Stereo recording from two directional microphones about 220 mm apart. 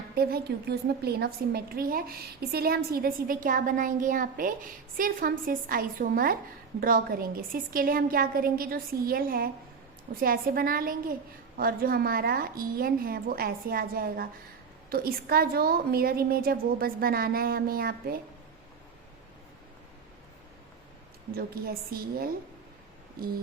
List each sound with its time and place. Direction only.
0.1 s a woman's voice: 45° right (ahead or behind)
21.3 s a woman's voice: 45° right (ahead or behind)